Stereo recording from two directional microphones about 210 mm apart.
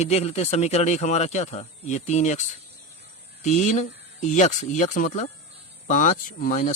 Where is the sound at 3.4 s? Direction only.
35° left (ahead or behind).